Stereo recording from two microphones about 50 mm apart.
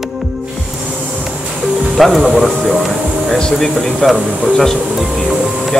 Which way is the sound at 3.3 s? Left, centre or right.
Centre.